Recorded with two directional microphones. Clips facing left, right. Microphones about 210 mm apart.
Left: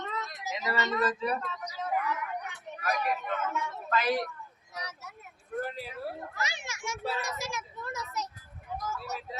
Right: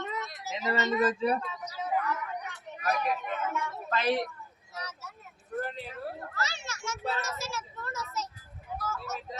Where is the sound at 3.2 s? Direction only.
15° right (ahead or behind).